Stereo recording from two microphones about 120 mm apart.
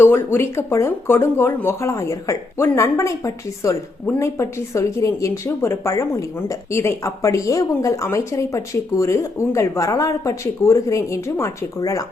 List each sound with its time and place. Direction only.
0.0 s a woman's voice: 20° left (ahead or behind)